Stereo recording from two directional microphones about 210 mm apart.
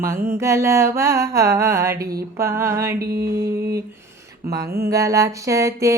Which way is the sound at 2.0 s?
45° right (ahead or behind).